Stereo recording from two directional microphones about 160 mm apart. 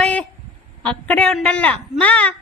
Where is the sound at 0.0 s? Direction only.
5° left (ahead or behind).